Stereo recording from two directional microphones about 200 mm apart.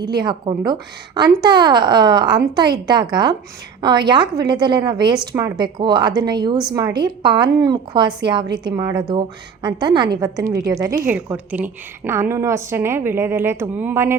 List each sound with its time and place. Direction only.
0.0 s a woman's voice: 20° right (ahead or behind)